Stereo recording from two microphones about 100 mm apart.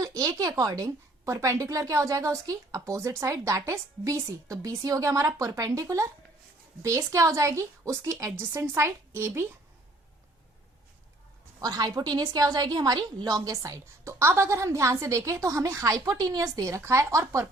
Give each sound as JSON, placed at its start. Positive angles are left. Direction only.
{"t": 0.0, "sound": "a woman's voice", "side_deg": -35}
{"t": 11.6, "sound": "a woman's voice", "side_deg": -40}